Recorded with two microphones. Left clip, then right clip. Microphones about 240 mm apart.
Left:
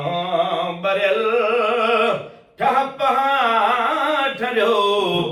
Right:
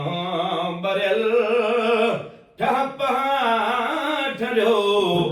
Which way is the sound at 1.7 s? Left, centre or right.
Centre.